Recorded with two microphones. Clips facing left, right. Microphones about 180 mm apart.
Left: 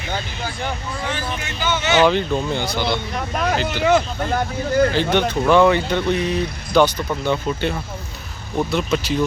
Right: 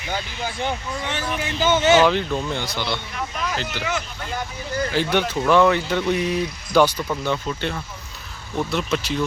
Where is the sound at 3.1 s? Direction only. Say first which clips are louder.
Left 6 dB; 50° left (ahead or behind).